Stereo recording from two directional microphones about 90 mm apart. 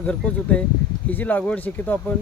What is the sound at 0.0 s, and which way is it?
A man's voice, 15° left (ahead or behind).